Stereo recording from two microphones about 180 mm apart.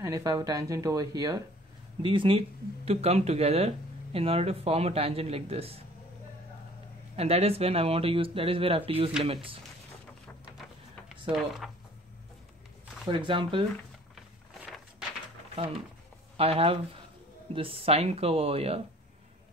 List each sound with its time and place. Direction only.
0.0 s speech: 20° right (ahead or behind); by 5.8 s 35° right (ahead or behind)
7.2 s speech: 35° right (ahead or behind)
13.1 s speech: 30° right (ahead or behind)
14.1 s a sound: centre (ahead or behind)
16.3 s speech: 35° right (ahead or behind)